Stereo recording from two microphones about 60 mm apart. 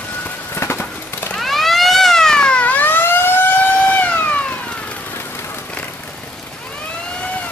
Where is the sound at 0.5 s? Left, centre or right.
Left.